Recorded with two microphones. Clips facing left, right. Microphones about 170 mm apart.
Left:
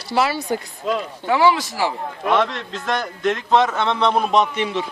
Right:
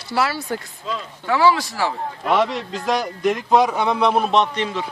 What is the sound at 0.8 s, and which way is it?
Speech, 60° left (ahead or behind).